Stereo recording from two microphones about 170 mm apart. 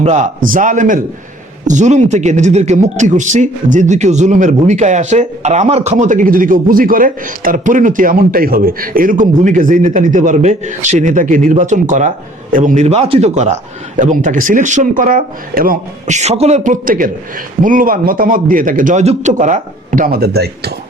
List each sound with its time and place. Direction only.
0.0 s a man's voice: 45° right (ahead or behind); by 20.7 s 70° right (ahead or behind)